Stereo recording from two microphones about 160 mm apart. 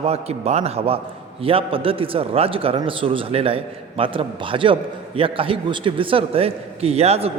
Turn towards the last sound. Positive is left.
turn(degrees=-40)  # may be behind; listen again after turning